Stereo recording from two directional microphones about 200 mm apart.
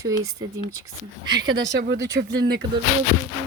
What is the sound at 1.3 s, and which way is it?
Speech, 55° right (ahead or behind).